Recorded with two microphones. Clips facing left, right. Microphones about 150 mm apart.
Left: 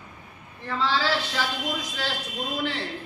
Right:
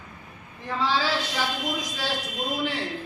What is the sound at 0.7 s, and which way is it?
Speech, 15° right (ahead or behind).